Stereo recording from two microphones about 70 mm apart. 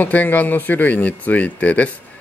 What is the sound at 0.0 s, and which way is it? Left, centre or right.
Speech, left.